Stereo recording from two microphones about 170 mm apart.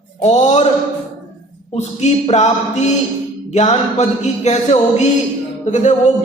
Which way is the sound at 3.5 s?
40° left (ahead or behind).